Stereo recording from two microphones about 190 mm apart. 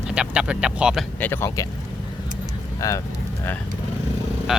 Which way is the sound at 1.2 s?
10° left (ahead or behind).